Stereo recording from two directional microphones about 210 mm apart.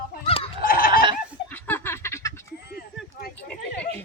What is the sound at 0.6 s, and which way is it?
Goat, 45° left (ahead or behind).